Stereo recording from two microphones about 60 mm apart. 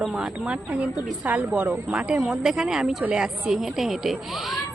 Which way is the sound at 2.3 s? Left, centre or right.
Centre.